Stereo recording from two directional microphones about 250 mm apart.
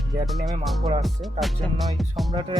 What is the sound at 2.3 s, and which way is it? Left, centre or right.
Speech, centre.